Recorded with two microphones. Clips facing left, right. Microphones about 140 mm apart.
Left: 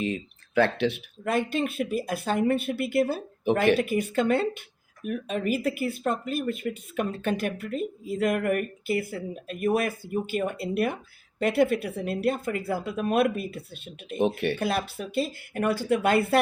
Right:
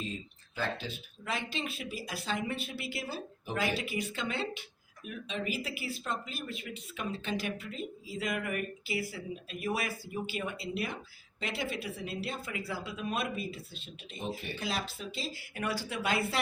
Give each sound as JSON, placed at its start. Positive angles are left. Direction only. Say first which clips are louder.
{"t": 0.0, "sound": "speech", "louder": "left 10 dB", "side_deg": 70}